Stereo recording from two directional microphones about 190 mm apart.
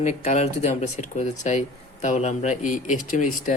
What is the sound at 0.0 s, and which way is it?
Speech, 35° left (ahead or behind).